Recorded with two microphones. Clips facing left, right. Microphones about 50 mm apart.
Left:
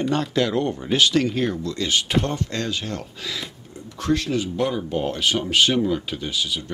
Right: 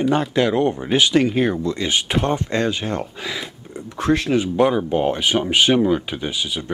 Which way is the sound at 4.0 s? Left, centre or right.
Right.